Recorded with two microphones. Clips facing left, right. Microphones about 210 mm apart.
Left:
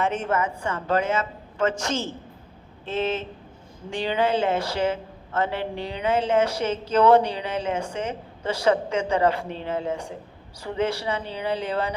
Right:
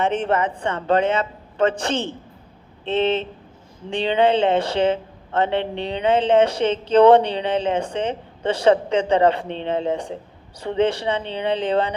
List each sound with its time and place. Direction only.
0.3 s a woman's voice: 30° right (ahead or behind)